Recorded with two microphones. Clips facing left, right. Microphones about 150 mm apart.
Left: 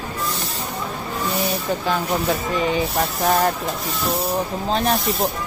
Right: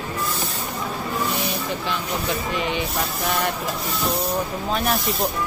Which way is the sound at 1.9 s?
40° left (ahead or behind).